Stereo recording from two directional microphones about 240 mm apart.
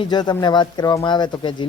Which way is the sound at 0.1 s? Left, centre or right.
Centre.